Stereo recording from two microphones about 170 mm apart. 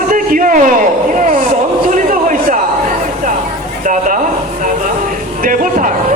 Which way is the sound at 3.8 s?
50° right (ahead or behind).